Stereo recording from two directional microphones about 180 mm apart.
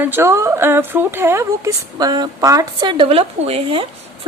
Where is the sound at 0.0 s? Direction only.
10° right (ahead or behind).